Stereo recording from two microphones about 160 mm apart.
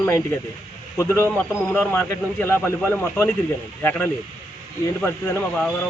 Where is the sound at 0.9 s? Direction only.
15° left (ahead or behind).